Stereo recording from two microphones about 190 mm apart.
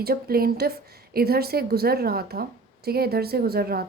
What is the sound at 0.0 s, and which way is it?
A woman's voice, 50° right (ahead or behind).